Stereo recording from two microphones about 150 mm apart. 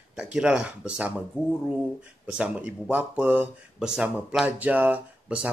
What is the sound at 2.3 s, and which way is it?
Speech, 10° right (ahead or behind).